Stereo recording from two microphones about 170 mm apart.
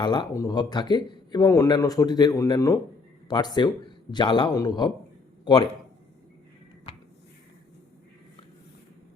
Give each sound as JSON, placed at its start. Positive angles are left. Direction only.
{"t": 0.0, "sound": "speech", "side_deg": 25}